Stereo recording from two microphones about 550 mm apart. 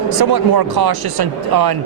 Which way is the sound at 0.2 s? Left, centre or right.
Right.